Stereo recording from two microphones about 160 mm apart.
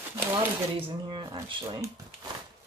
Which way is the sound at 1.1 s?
30° right (ahead or behind).